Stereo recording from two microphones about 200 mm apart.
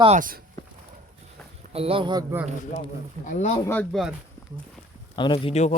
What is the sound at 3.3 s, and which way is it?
Speech, 35° left (ahead or behind).